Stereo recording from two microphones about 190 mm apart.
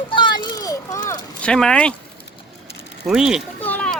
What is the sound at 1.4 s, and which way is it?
Speech, 5° left (ahead or behind).